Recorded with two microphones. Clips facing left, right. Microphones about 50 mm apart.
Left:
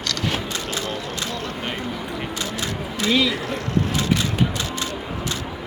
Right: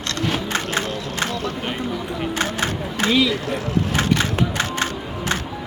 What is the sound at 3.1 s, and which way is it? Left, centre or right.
Speech, centre.